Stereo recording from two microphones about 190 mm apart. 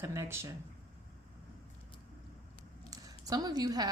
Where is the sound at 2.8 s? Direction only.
20° right (ahead or behind).